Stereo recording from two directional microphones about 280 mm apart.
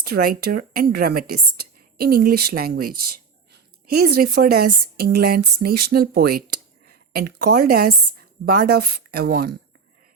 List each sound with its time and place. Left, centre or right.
0.0 s speech: right